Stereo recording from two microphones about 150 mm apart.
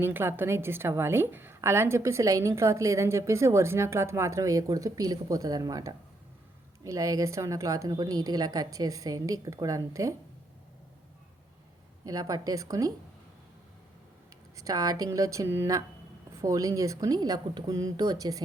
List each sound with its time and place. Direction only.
0.0 s a woman's voice: 15° right (ahead or behind)
12.0 s a woman's voice: 25° right (ahead or behind)
14.6 s a woman's voice: 25° right (ahead or behind)